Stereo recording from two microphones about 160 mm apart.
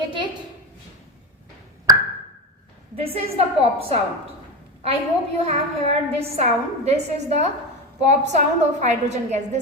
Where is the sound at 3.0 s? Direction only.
40° right (ahead or behind).